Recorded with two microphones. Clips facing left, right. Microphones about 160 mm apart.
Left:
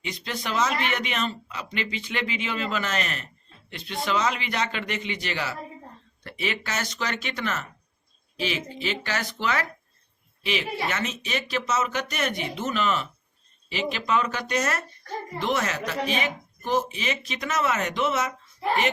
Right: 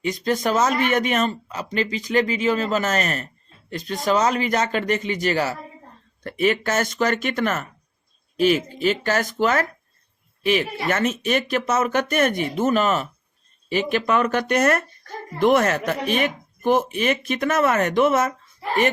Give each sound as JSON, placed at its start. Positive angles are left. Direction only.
{"t": 0.0, "sound": "speech", "side_deg": -45}